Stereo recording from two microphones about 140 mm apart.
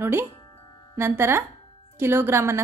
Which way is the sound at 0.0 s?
15° right (ahead or behind).